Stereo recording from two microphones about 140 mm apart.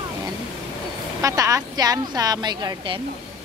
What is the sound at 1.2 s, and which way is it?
A woman's voice, 25° right (ahead or behind).